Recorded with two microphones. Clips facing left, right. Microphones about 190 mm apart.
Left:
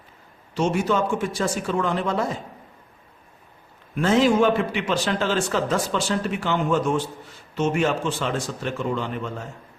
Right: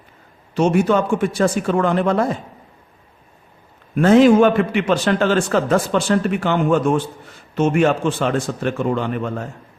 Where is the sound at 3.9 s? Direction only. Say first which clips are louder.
Right 8 dB; 55° right (ahead or behind).